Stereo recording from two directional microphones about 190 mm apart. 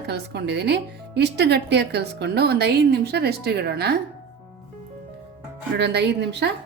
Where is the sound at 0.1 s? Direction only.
60° right (ahead or behind).